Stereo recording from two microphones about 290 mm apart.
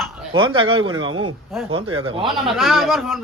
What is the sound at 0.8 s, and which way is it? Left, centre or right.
Speech, right.